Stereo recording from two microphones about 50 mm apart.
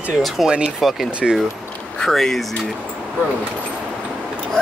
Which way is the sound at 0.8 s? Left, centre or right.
Centre.